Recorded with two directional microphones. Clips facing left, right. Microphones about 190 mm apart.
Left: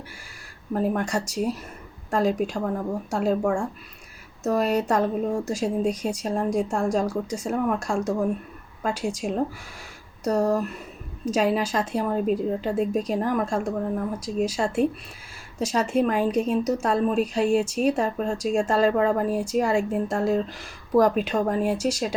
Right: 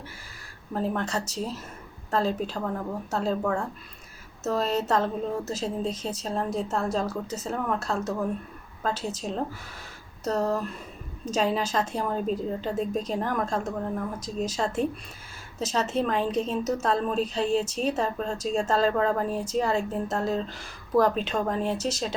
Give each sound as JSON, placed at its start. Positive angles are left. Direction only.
{"t": 0.7, "sound": "a woman's voice", "side_deg": 10}